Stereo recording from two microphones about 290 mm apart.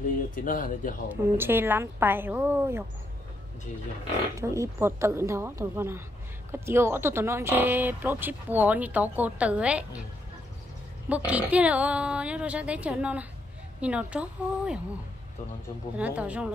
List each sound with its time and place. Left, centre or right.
0.3 s speech: left
1.0 s speech: centre
4.4 s speech: centre
11.1 s a woman's voice: centre
16.0 s a woman's voice: centre